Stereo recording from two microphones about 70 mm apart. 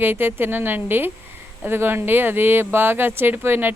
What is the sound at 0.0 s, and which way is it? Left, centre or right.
Speech, right.